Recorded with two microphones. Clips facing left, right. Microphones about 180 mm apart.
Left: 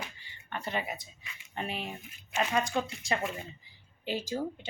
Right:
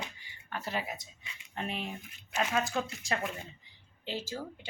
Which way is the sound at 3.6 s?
5° left (ahead or behind).